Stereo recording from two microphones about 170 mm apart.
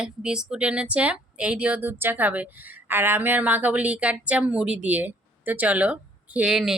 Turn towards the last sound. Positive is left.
turn(degrees=-5)  # may be behind; listen again after turning